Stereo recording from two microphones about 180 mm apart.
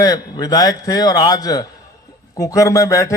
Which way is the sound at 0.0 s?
20° left (ahead or behind).